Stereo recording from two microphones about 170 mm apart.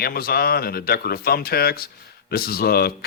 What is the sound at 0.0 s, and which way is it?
Speech, 60° left (ahead or behind).